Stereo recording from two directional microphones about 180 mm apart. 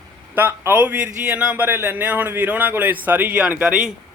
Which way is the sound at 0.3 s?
10° right (ahead or behind).